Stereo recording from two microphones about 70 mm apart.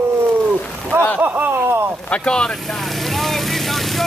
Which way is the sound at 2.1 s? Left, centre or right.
Centre.